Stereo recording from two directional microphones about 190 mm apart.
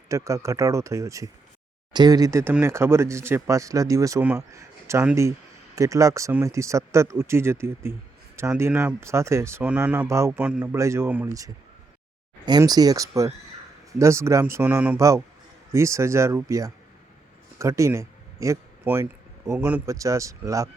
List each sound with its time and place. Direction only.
0.1 s speech: 15° right (ahead or behind)